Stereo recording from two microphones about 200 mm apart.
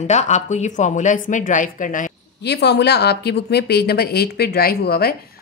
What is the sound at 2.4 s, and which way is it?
A woman's voice, 55° left (ahead or behind).